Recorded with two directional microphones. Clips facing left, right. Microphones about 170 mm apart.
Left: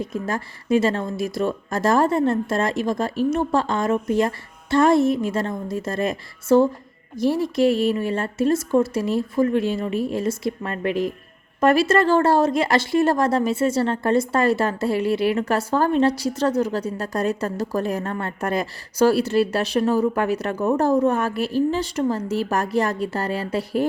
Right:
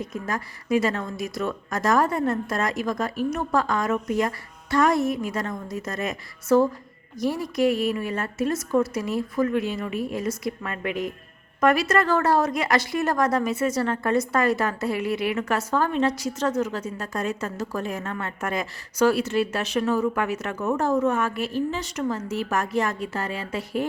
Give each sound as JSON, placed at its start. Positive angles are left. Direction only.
{"t": 0.0, "sound": "speech", "side_deg": 30}